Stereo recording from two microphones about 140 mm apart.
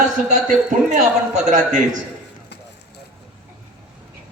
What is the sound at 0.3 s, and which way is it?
A man's voice, 65° right (ahead or behind).